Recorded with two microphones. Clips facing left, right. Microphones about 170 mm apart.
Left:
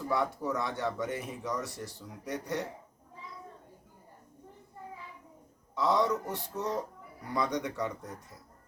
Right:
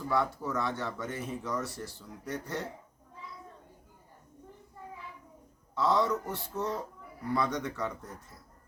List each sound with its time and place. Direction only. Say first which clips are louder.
0.1 s speech: even; 20° left (ahead or behind)
5.7 s speech: even; 20° left (ahead or behind)